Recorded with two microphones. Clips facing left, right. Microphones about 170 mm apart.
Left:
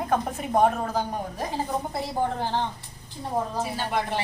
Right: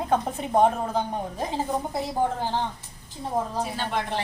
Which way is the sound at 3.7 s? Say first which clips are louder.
Left 1 dB; 10° left (ahead or behind).